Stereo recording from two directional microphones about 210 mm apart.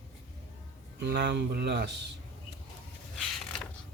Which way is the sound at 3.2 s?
5° left (ahead or behind).